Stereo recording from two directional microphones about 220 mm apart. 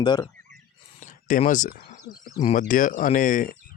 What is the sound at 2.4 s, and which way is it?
Speech, 35° left (ahead or behind).